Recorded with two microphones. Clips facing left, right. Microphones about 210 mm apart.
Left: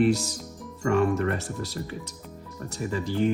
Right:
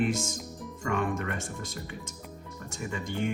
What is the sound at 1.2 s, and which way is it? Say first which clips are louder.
Speech: left 7 dB; 35° left (ahead or behind).